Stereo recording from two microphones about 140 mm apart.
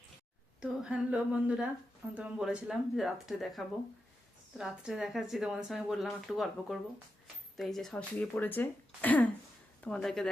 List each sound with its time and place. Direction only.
0.6 s a woman's voice: 5° right (ahead or behind)